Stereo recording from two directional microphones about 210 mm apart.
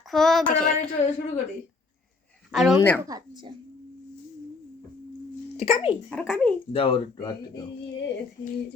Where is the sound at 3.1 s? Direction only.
20° right (ahead or behind).